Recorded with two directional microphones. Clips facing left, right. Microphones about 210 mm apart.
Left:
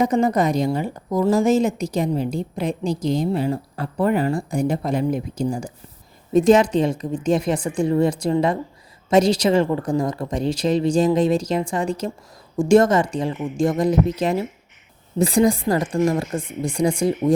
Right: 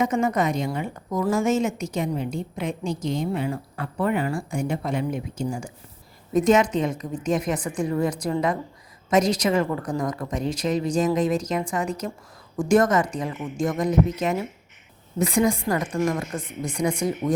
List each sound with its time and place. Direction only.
0.0 s a woman's voice: 35° left (ahead or behind)